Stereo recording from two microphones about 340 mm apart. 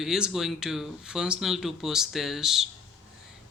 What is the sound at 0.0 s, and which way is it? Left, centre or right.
Speech, centre.